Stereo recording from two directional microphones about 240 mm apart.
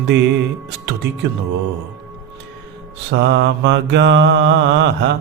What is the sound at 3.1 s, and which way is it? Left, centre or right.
Mantra, right.